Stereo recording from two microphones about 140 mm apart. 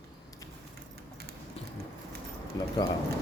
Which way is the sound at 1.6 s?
45° left (ahead or behind).